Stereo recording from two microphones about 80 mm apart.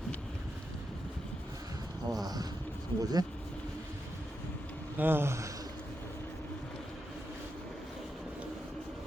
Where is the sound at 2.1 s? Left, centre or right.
Right.